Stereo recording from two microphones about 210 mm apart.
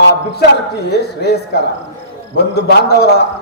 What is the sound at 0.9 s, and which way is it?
A man's voice, 50° left (ahead or behind).